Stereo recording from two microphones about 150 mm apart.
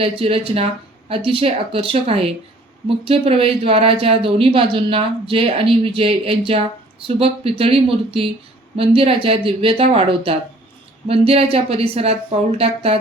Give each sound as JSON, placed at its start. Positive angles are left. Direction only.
{"t": 0.0, "sound": "speech", "side_deg": -40}